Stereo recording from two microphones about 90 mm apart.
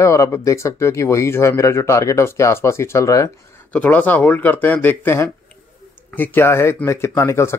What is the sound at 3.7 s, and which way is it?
Speech, 15° left (ahead or behind).